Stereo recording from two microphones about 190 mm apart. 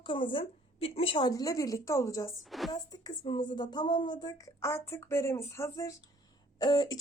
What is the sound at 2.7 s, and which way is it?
Speech, 20° left (ahead or behind).